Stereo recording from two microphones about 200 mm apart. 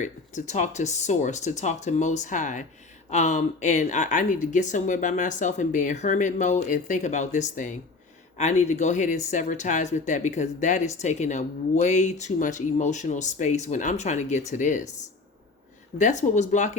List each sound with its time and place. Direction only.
0.0 s speech: 35° left (ahead or behind)
16.0 s speech: 35° left (ahead or behind)